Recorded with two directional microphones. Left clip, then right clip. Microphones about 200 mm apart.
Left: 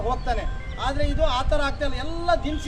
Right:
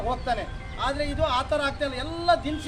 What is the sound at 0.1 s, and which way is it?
A man's voice, centre (ahead or behind).